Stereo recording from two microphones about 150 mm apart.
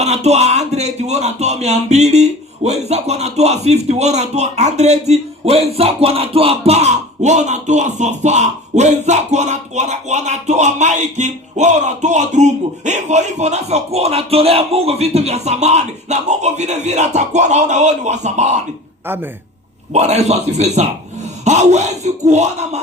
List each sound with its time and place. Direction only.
0.0 s speech: 45° right (ahead or behind)
19.9 s speech: 45° right (ahead or behind)